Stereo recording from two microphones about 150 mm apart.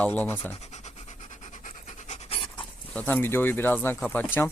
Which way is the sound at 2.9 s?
10° left (ahead or behind).